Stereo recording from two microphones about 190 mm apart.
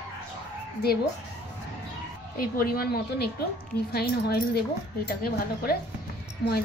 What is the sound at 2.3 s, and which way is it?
A woman's voice, 50° left (ahead or behind).